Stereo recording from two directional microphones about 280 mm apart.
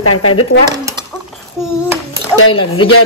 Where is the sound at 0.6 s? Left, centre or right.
Centre.